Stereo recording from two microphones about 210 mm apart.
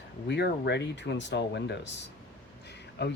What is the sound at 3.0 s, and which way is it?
Speech, 55° left (ahead or behind).